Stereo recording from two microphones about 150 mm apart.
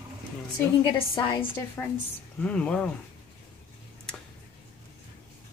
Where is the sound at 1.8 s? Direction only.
10° left (ahead or behind).